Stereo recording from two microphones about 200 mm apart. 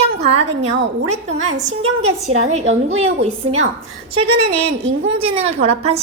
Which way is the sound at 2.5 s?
35° right (ahead or behind).